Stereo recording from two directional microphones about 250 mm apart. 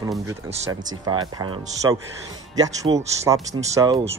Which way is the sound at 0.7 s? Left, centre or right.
Centre.